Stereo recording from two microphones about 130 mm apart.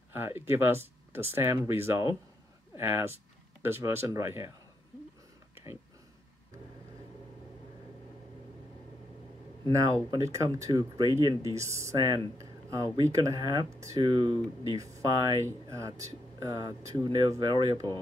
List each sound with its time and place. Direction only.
0.1 s speech: 15° right (ahead or behind)
5.5 s a sound: 20° right (ahead or behind)
9.7 s speech: 30° right (ahead or behind)
14.0 s speech: 35° right (ahead or behind)